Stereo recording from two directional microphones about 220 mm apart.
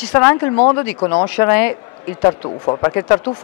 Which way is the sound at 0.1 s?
15° left (ahead or behind).